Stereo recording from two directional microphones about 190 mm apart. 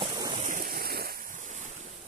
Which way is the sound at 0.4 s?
45° right (ahead or behind).